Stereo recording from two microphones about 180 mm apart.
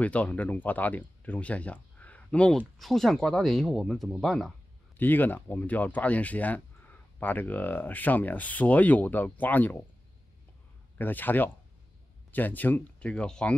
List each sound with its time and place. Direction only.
0.0 s speech: 10° left (ahead or behind)
11.0 s speech: 10° left (ahead or behind)